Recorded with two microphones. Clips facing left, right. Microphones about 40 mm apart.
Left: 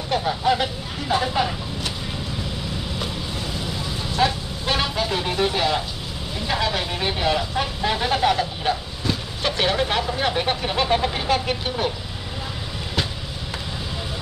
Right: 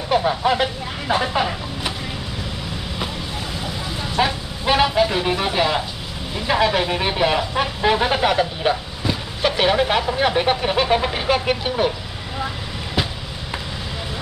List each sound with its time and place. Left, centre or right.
0.1 s speech: centre
4.2 s speech: centre